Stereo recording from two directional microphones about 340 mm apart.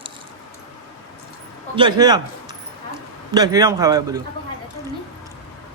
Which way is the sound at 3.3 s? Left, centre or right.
Centre.